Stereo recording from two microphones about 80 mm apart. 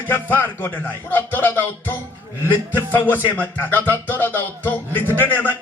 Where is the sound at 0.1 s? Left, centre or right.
Left.